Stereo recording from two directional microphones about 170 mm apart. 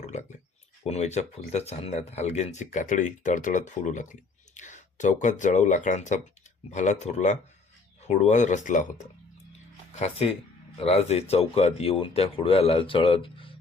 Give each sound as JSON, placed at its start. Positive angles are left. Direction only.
{"t": 0.0, "sound": "a sound", "side_deg": 45}
{"t": 0.9, "sound": "speech", "side_deg": 40}
{"t": 10.0, "sound": "speech", "side_deg": 35}